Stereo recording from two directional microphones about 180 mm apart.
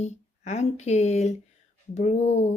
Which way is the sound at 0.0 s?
40° left (ahead or behind).